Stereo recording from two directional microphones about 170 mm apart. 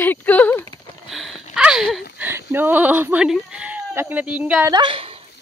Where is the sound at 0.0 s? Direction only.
10° left (ahead or behind).